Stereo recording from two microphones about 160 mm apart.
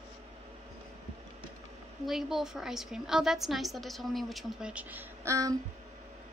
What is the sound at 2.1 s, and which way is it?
A woman's voice, centre (ahead or behind).